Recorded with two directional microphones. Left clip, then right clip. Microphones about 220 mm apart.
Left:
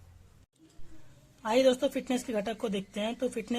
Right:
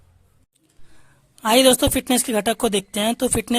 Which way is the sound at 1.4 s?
35° right (ahead or behind).